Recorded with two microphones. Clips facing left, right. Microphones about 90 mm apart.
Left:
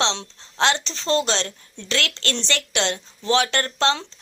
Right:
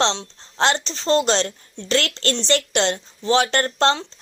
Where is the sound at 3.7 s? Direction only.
45° right (ahead or behind).